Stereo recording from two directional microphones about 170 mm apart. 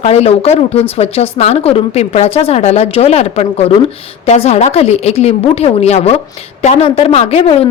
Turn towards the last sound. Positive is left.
turn(degrees=35)  # may be behind; listen again after turning